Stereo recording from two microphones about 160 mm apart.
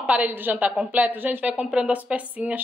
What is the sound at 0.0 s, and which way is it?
A woman's voice, 10° right (ahead or behind).